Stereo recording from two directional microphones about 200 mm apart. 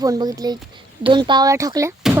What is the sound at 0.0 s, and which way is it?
Speech, 20° right (ahead or behind).